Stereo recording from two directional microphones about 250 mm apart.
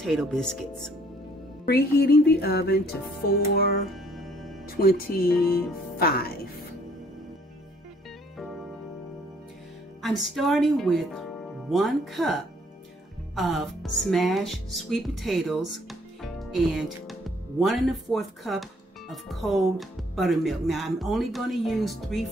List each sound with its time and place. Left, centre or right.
0.0 s speech: centre
1.7 s music: left
3.9 s music: centre
4.6 s music: left
5.9 s speech: left
10.0 s speech: centre